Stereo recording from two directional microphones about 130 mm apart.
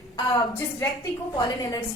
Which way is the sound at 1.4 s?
30° left (ahead or behind).